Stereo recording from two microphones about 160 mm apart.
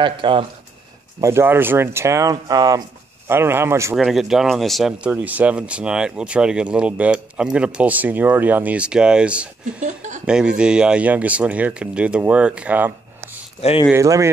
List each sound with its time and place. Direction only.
0.0 s speech: 30° right (ahead or behind)
1.2 s speech: 15° right (ahead or behind)
3.9 s speech: centre (ahead or behind)
9.8 s speech: 50° right (ahead or behind)
10.2 s speech: 5° right (ahead or behind)
13.6 s speech: 40° left (ahead or behind)
13.9 s speech: 20° right (ahead or behind)